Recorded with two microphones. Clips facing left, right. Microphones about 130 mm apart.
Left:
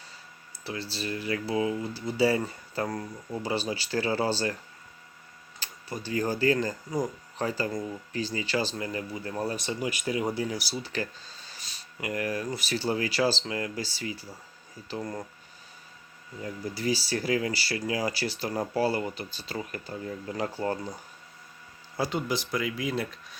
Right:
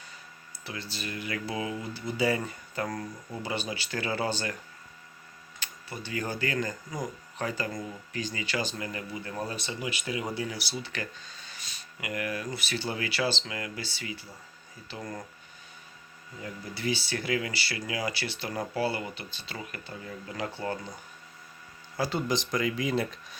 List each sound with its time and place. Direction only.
0.6 s speech: 35° left (ahead or behind)
5.5 s speech: 35° left (ahead or behind)
16.4 s speech: 40° left (ahead or behind)
21.9 s speech: 25° left (ahead or behind)
22.3 s speech: 5° left (ahead or behind)